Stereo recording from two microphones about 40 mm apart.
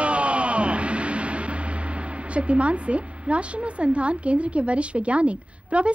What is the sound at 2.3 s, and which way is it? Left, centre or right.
A woman's voice, right.